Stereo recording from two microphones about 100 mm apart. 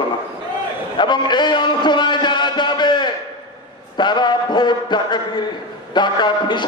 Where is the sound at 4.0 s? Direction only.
50° left (ahead or behind).